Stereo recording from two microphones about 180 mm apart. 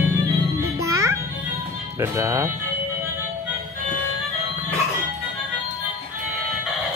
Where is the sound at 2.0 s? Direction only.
15° right (ahead or behind).